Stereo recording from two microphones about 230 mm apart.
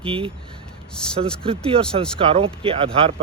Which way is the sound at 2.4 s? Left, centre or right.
Right.